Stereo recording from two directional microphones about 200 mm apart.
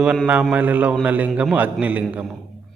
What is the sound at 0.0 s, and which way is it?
Speech, 5° right (ahead or behind).